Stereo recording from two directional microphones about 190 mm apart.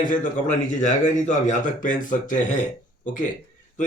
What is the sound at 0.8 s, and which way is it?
Speech, 40° left (ahead or behind).